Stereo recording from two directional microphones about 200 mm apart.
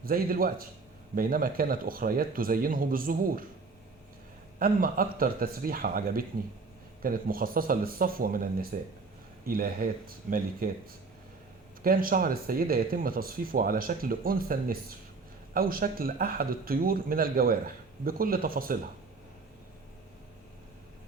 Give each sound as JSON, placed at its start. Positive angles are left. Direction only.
{"t": 0.0, "sound": "speech", "side_deg": -45}
{"t": 4.6, "sound": "speech", "side_deg": -45}
{"t": 11.8, "sound": "speech", "side_deg": -45}